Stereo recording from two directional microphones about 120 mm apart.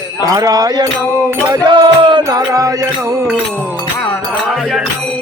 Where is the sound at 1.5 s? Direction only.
40° right (ahead or behind).